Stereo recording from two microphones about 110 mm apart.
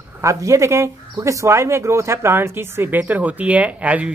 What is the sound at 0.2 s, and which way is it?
Speech, 30° right (ahead or behind).